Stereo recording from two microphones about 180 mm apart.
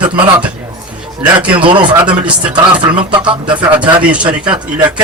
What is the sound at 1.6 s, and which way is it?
Speech, 25° right (ahead or behind).